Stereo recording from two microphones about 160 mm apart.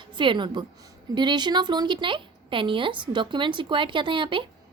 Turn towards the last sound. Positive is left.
turn(degrees=-30)  # may be behind; listen again after turning